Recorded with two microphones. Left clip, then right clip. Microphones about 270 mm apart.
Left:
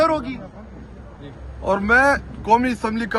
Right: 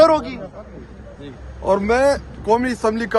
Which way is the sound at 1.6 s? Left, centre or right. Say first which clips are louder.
Even; centre.